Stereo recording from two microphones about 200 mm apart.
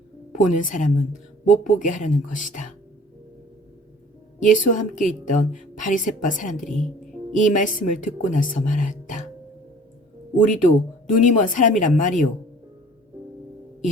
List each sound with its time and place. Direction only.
0.3 s a woman's voice: 40° left (ahead or behind)
4.4 s a woman's voice: 40° left (ahead or behind)
10.3 s a woman's voice: 40° left (ahead or behind)